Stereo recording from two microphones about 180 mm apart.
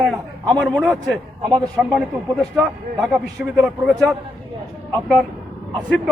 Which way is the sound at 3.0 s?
Centre (ahead or behind).